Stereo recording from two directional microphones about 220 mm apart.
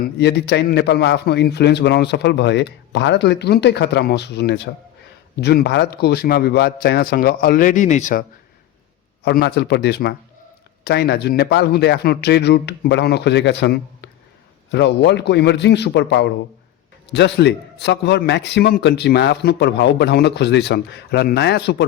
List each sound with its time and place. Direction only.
0.0 s a man's voice: 50° left (ahead or behind); by 8.2 s 35° left (ahead or behind)
9.2 s a man's voice: 45° left (ahead or behind)